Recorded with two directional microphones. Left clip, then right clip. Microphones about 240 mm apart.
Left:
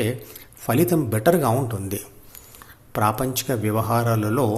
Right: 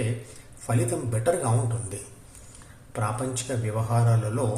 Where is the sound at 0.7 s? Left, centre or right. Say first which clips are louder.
Left 8 dB; left.